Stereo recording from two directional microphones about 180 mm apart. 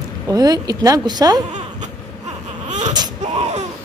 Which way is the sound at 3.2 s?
40° right (ahead or behind).